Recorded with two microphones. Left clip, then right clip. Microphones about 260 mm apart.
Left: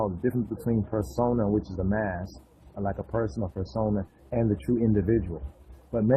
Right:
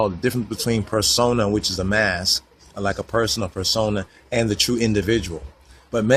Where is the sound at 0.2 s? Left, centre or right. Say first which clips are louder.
Right 6 dB; right.